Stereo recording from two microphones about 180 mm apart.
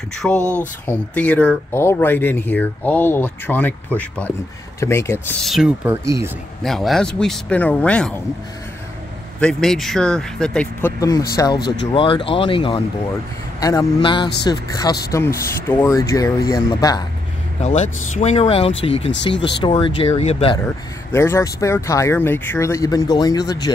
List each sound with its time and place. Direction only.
0.2 s speech: 5° left (ahead or behind)
5.4 s speech: centre (ahead or behind)
5.9 s speech: 15° right (ahead or behind)
6.6 s speech: centre (ahead or behind)
9.4 s speech: 5° left (ahead or behind)
11.0 s speech: 20° left (ahead or behind)
11.6 s speech: 85° left
11.9 s speech: 30° left (ahead or behind)
13.6 s speech: 20° left (ahead or behind)
17.6 s speech: 40° left (ahead or behind)
19.0 s speech: 80° left
19.6 s speech: 30° left (ahead or behind)
20.5 s speech: 15° left (ahead or behind)